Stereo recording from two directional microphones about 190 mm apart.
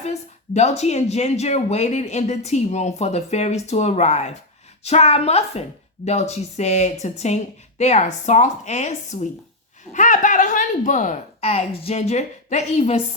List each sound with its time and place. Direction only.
0.0 s speech: 35° left (ahead or behind)